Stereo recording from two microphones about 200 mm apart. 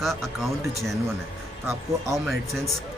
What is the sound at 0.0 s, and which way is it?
Speech, centre (ahead or behind).